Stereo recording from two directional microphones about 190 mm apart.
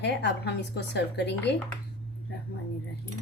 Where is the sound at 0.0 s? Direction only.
60° left (ahead or behind).